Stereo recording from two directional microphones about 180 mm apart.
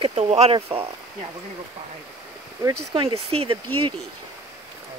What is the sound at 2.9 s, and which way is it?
Speech, 30° right (ahead or behind).